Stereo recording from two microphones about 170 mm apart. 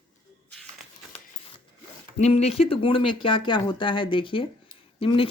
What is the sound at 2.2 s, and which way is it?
Speech, 40° left (ahead or behind).